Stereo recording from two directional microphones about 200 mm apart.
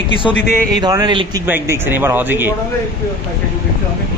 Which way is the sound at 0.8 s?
20° right (ahead or behind).